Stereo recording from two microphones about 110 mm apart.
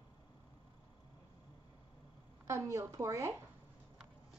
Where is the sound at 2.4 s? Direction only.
25° right (ahead or behind).